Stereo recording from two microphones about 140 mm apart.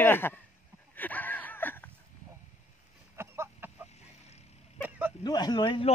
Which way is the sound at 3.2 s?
20° right (ahead or behind).